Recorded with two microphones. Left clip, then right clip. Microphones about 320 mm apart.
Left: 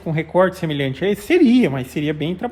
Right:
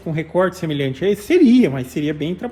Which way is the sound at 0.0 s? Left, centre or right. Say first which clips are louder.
Left 2 dB; left.